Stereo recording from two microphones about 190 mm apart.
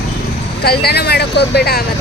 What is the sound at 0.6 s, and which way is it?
Speech, 55° left (ahead or behind).